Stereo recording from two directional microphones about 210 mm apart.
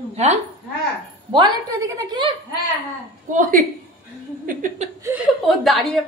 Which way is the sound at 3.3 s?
40° right (ahead or behind).